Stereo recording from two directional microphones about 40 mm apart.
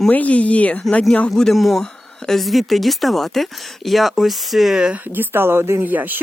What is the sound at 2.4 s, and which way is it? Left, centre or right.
Speech, centre.